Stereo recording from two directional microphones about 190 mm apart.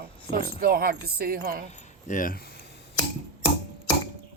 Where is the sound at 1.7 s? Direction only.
40° left (ahead or behind); by 2.8 s 60° left (ahead or behind).